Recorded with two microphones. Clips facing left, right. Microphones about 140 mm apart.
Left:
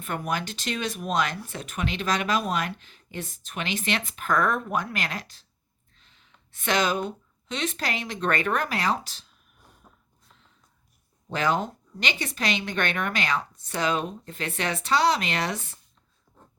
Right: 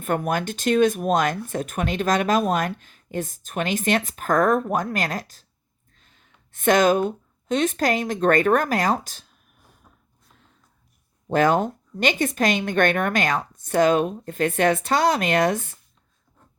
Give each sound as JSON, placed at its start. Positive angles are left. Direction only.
{"t": 0.0, "sound": "speech", "side_deg": -50}
{"t": 9.9, "sound": "a sound", "side_deg": 15}
{"t": 11.3, "sound": "speech", "side_deg": -50}